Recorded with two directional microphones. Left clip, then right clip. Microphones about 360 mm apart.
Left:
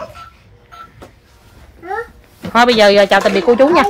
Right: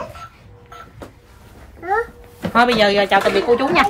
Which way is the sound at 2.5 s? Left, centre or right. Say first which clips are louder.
Left 5 dB; centre.